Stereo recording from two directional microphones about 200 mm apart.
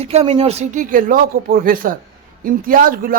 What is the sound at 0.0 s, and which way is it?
A man's voice, 30° right (ahead or behind).